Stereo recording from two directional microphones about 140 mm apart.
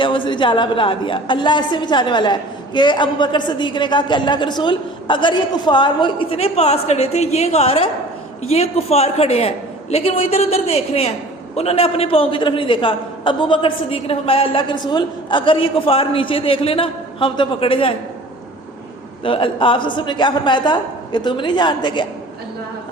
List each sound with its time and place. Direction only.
0.0 s a woman's voice: 35° left (ahead or behind)
19.2 s a woman's voice: 40° left (ahead or behind)